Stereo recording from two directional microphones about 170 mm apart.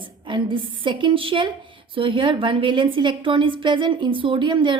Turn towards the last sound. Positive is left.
turn(degrees=-30)  # may be behind; listen again after turning